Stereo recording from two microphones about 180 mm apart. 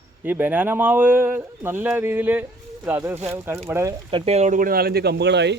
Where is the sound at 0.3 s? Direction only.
10° right (ahead or behind).